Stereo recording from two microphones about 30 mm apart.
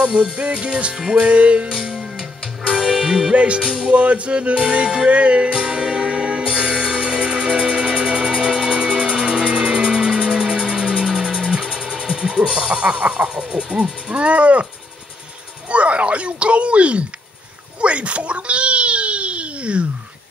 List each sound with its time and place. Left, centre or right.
0.0 s music: right
0.9 s music: right
1.2 s music: right
1.7 s music: right
3.5 s music: right
5.1 s a sound: right
5.5 s music: right
14.2 s a sound: right
15.7 s speech: right